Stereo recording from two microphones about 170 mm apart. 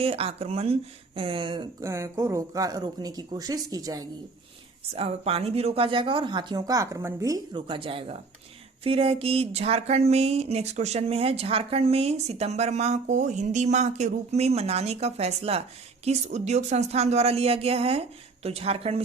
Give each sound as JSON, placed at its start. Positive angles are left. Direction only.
{"t": 0.0, "sound": "speech", "side_deg": -35}
{"t": 1.8, "sound": "speech", "side_deg": -15}
{"t": 4.9, "sound": "speech", "side_deg": -35}